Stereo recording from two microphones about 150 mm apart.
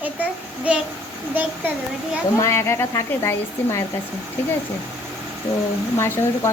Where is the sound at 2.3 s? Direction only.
20° left (ahead or behind).